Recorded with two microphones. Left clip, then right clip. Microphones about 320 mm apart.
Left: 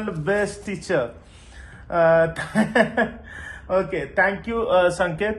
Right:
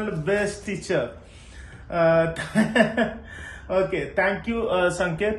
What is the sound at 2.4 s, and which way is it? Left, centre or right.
A man's voice, centre.